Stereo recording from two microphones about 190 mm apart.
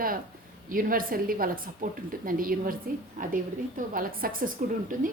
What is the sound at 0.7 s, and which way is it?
A woman's voice, 45° right (ahead or behind).